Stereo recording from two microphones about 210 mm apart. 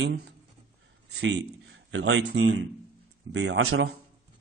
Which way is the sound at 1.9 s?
60° right (ahead or behind).